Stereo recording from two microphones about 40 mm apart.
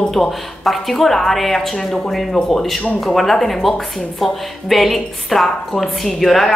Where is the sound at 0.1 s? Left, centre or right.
Centre.